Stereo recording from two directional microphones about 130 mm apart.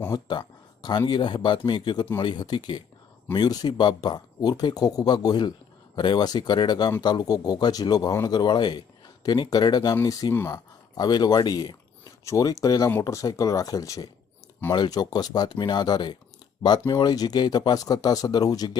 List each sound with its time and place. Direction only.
0.1 s speech: 35° left (ahead or behind)